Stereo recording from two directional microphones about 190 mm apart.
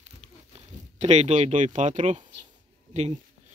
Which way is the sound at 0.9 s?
35° right (ahead or behind).